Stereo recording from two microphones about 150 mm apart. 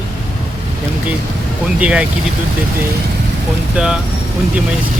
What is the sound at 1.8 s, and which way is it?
Speech, 10° right (ahead or behind).